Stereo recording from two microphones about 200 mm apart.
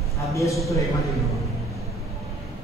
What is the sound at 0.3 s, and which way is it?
Speech, 15° left (ahead or behind).